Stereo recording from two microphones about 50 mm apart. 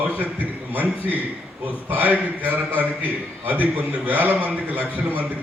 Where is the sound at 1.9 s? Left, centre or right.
Right.